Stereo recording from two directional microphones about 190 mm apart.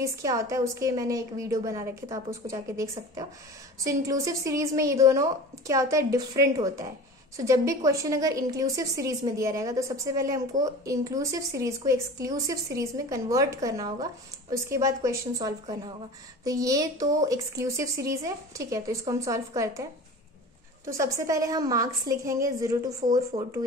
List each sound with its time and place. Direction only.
0.0 s speech: 15° right (ahead or behind)
23.3 s speech: 45° right (ahead or behind)